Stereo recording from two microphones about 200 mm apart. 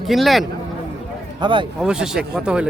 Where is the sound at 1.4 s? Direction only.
25° right (ahead or behind).